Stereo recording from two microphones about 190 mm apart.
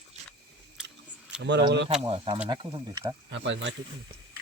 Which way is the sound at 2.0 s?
25° right (ahead or behind).